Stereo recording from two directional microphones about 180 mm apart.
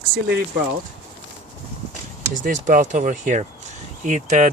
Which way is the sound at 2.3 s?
45° right (ahead or behind).